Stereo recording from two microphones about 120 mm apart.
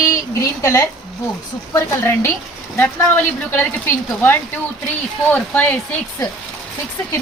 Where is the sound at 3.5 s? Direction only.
20° left (ahead or behind).